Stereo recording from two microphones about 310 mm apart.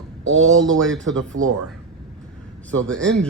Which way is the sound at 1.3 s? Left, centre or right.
Right.